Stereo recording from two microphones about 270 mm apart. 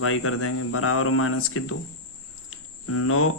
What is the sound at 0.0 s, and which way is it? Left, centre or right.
Speech, left.